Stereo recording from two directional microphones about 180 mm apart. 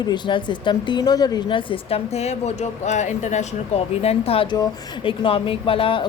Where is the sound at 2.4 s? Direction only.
40° left (ahead or behind).